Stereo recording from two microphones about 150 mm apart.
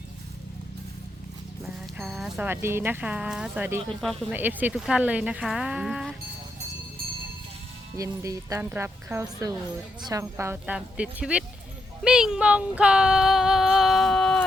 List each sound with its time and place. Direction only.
1.6 s speech: 5° right (ahead or behind)
2.5 s speech: 15° right (ahead or behind)
4.0 s speech: centre (ahead or behind)
4.4 s speech: 10° right (ahead or behind)
7.9 s speech: 20° right (ahead or behind)
12.0 s female singing: 5° right (ahead or behind)